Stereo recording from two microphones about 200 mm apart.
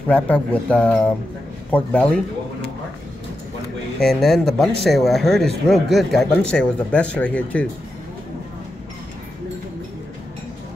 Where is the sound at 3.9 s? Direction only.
Centre (ahead or behind).